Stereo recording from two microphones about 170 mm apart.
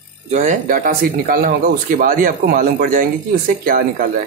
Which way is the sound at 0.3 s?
45° right (ahead or behind).